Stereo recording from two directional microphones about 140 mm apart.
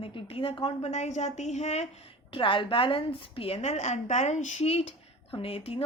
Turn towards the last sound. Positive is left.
turn(degrees=45)  # may be behind; listen again after turning